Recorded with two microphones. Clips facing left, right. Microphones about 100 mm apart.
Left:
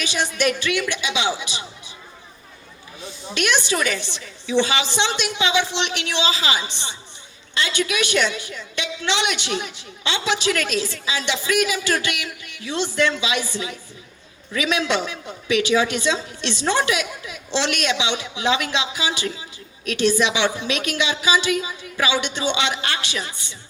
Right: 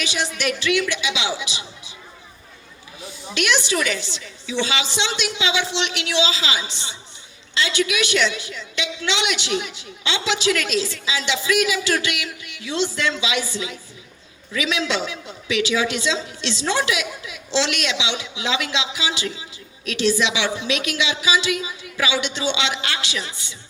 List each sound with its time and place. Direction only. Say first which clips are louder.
0.0 s a woman's voice: left 3 dB; 45° left (ahead or behind)
3.0 s a woman's voice: even; 40° left (ahead or behind)